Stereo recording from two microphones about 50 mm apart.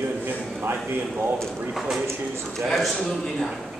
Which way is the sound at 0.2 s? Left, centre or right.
Right.